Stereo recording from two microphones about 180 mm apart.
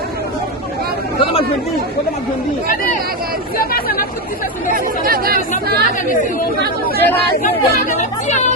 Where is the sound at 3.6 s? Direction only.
55° left (ahead or behind).